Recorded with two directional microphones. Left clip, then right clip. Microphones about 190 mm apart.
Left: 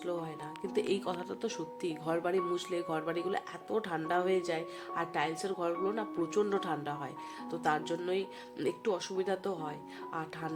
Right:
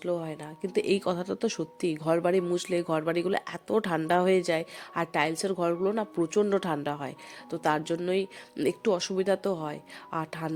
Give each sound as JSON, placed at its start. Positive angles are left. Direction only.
{"t": 0.0, "sound": "speech", "side_deg": -35}